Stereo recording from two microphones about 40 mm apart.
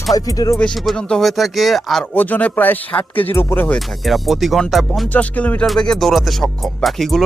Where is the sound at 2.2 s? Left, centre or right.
Left.